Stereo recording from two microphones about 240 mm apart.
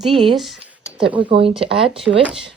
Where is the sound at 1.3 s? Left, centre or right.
Right.